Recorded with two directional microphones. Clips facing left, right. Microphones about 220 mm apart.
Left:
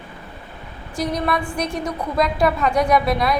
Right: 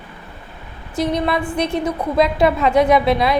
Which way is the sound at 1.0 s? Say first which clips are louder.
Right 3 dB; 25° right (ahead or behind).